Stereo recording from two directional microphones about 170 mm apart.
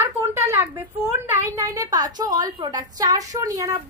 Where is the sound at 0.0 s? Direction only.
15° right (ahead or behind).